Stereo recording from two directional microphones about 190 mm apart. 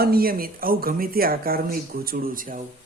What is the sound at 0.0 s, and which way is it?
Speech, 55° right (ahead or behind).